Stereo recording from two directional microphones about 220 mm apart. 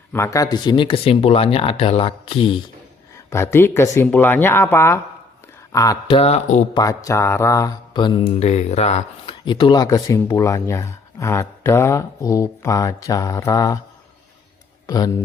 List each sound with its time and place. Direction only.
0.1 s mantra: 15° left (ahead or behind)
3.2 s speech: 10° left (ahead or behind)
5.7 s mantra: 15° left (ahead or behind)
6.7 s mantra: 15° left (ahead or behind)
9.4 s speech: 20° left (ahead or behind)
14.8 s speech: 15° left (ahead or behind)